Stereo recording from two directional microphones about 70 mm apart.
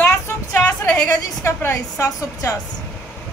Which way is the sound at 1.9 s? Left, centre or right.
Left.